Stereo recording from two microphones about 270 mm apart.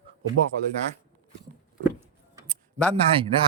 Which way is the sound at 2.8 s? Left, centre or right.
Right.